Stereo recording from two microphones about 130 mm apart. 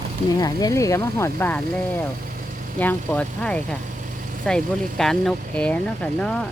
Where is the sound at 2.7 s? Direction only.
10° left (ahead or behind).